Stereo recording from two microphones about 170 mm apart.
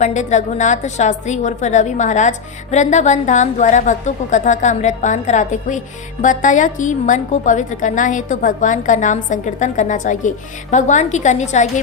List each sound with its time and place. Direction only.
0.0 s a woman's voice: 45° left (ahead or behind)